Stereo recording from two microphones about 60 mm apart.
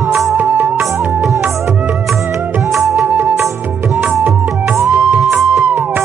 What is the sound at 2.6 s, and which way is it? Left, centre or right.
Music, centre.